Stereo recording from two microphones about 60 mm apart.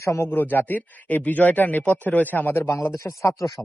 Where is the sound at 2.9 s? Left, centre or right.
Left.